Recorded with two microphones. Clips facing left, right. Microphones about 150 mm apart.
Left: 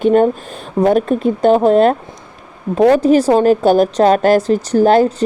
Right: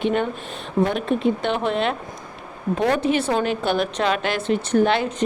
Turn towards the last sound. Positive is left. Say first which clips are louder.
# left 8 dB
turn(degrees=40)  # may be behind; listen again after turning